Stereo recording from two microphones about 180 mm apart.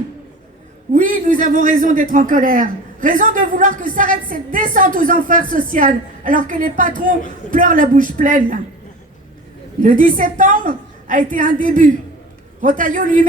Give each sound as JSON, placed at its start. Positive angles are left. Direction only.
{"t": 0.9, "sound": "a man's voice", "side_deg": -50}
{"t": 9.8, "sound": "a man's voice", "side_deg": -50}